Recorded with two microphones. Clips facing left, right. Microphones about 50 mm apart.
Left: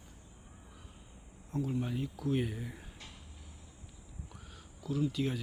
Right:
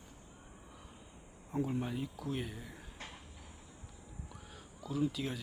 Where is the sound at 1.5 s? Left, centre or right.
Centre.